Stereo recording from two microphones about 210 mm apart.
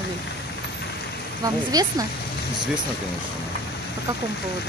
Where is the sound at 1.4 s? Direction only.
15° right (ahead or behind).